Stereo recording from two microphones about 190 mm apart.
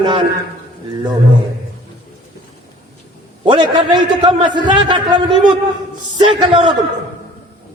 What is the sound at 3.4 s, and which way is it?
A man's voice, 25° right (ahead or behind).